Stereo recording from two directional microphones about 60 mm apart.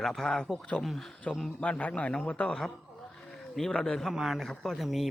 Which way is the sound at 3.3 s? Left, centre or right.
Centre.